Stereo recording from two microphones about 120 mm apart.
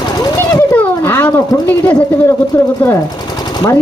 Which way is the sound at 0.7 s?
15° left (ahead or behind).